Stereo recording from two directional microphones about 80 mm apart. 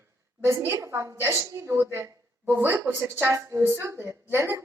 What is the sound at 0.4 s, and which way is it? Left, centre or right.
Speech, right.